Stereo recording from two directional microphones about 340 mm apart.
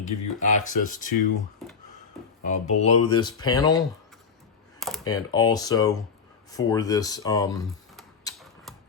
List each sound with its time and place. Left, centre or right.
0.0 s speech: left
2.4 s speech: centre
5.0 s speech: centre
7.9 s typewriter: centre